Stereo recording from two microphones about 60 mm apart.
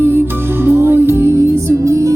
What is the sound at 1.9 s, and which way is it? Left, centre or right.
Music, right.